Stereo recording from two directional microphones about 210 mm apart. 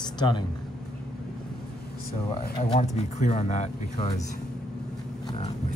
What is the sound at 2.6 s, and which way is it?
Speech, 30° left (ahead or behind).